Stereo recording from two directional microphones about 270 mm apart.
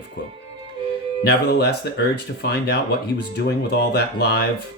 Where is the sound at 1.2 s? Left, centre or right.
Left.